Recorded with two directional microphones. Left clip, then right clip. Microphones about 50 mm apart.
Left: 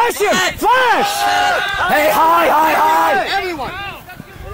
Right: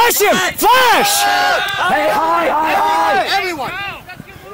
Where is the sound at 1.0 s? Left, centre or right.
Right.